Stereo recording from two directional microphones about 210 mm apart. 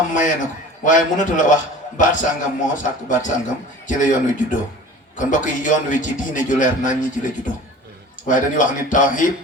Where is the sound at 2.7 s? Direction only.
35° left (ahead or behind).